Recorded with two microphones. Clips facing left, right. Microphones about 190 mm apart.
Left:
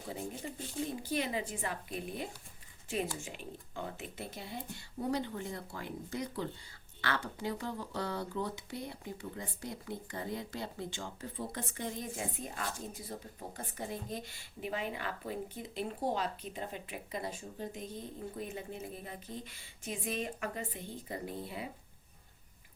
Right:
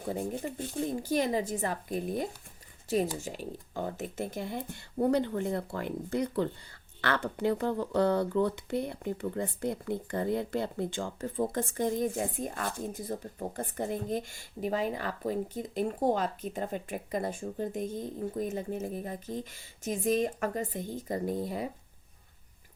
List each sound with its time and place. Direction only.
0.0 s speech: 55° right (ahead or behind)
0.9 s speech: 45° right (ahead or behind)